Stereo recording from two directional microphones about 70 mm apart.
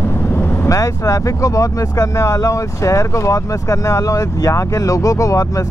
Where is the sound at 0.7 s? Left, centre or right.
Left.